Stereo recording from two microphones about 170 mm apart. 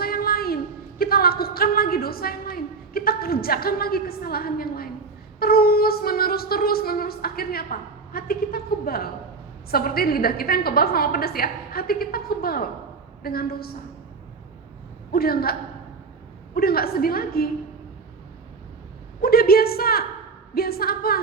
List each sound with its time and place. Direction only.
0.0 s a sound: 60° left (ahead or behind)
5.4 s speech: 65° left (ahead or behind)
15.1 s speech: 65° left (ahead or behind)
16.6 s speech: 60° left (ahead or behind)
19.2 s speech: 65° left (ahead or behind)